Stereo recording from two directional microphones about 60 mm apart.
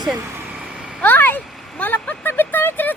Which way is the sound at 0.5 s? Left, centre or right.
Centre.